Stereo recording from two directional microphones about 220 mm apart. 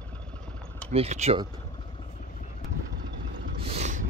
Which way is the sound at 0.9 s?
30° right (ahead or behind).